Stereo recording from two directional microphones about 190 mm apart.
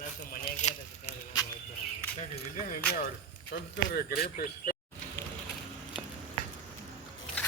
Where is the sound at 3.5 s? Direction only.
60° left (ahead or behind).